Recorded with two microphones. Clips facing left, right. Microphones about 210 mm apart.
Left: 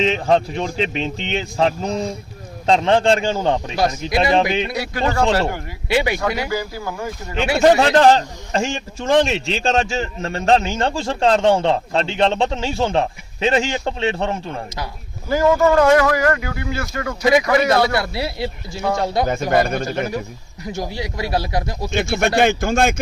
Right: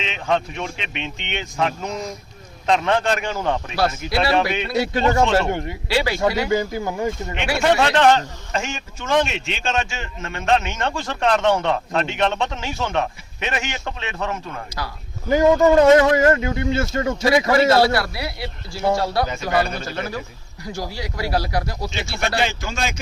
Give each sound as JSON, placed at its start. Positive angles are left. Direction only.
{"t": 0.0, "sound": "a man's voice", "side_deg": 35}
{"t": 4.1, "sound": "speech", "side_deg": 15}
{"t": 4.7, "sound": "a man's voice", "side_deg": -25}
{"t": 5.9, "sound": "speech", "side_deg": 20}
{"t": 6.5, "sound": "a man's voice", "side_deg": -20}
{"t": 7.6, "sound": "a man's voice", "side_deg": 35}
{"t": 15.3, "sound": "a man's voice", "side_deg": -20}
{"t": 17.7, "sound": "speech", "side_deg": 20}
{"t": 19.3, "sound": "speech", "side_deg": 50}
{"t": 20.7, "sound": "speech", "side_deg": 20}
{"t": 21.8, "sound": "speech", "side_deg": 50}